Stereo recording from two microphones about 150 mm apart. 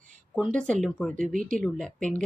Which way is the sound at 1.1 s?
60° right (ahead or behind).